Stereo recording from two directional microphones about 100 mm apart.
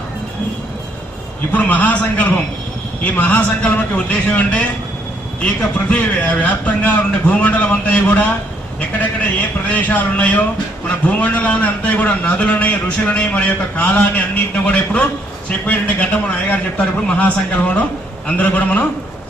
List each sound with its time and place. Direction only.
1.5 s a man's voice: 15° left (ahead or behind)
5.9 s a man's voice: 15° left (ahead or behind)
9.6 s a man's voice: 15° left (ahead or behind)